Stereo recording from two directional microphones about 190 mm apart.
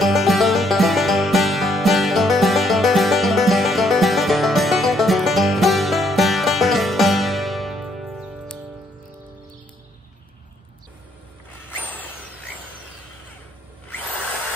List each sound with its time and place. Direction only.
0.0 s music: centre (ahead or behind)